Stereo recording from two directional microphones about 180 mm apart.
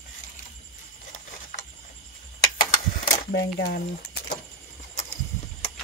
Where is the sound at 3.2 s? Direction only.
60° left (ahead or behind).